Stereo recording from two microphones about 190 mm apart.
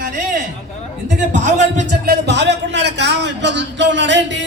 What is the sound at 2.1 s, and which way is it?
A man's voice, 65° right (ahead or behind).